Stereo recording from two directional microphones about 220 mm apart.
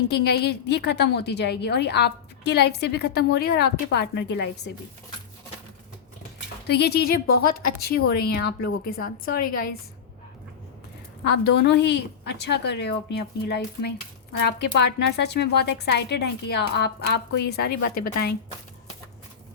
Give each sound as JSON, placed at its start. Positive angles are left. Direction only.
{"t": 0.1, "sound": "a woman's voice", "side_deg": 50}
{"t": 6.7, "sound": "a woman's voice", "side_deg": 50}
{"t": 11.3, "sound": "a woman's voice", "side_deg": 50}